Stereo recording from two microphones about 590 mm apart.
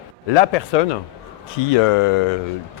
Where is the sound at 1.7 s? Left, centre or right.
Left.